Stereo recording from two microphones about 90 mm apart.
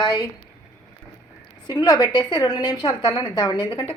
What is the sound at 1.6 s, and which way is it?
A woman's voice, 50° left (ahead or behind).